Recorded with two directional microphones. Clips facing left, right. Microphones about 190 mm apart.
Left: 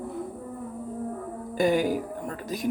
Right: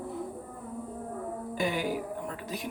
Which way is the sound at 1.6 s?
45° left (ahead or behind).